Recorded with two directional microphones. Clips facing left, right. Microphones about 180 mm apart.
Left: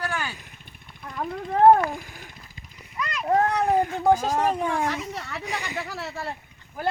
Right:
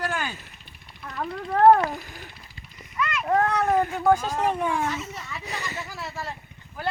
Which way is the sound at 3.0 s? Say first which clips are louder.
Right 2 dB; 35° left (ahead or behind).